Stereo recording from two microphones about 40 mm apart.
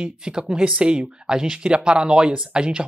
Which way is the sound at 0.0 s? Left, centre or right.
Right.